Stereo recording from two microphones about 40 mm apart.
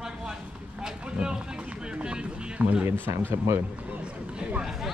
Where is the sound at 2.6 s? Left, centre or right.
Right.